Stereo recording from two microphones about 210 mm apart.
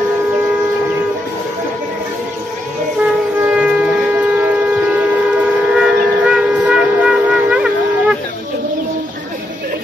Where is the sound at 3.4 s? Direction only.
5° right (ahead or behind).